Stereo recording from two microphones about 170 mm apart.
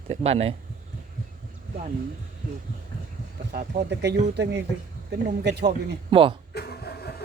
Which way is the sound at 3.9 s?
90° right.